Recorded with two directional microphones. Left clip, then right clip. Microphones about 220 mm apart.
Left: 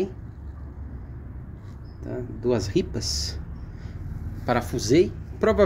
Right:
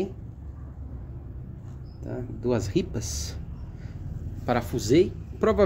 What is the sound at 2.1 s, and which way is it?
Speech, centre (ahead or behind).